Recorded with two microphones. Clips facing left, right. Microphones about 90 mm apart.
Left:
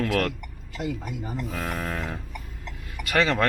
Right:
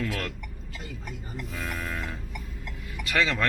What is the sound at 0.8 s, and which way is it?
Speech, 90° left.